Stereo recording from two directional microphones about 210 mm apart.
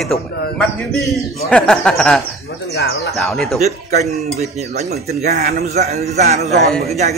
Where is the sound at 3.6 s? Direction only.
30° right (ahead or behind).